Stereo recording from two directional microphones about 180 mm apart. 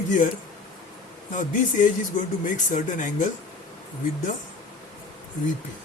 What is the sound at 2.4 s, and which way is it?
Speech, 45° left (ahead or behind).